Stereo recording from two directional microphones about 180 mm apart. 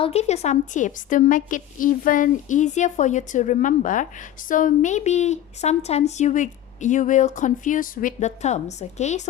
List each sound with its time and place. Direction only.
0.0 s a woman's voice: 35° left (ahead or behind)